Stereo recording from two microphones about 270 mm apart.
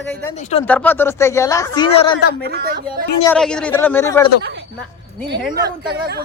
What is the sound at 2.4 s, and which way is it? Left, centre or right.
Speech, right.